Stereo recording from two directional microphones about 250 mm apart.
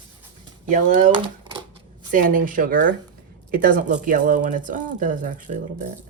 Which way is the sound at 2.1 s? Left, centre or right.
Right.